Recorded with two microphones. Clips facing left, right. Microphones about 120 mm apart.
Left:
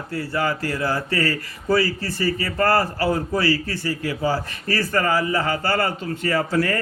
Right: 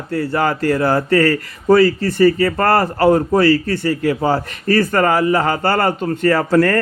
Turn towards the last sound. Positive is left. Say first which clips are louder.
# right 7 dB
turn(degrees=-65)  # may be behind; listen again after turning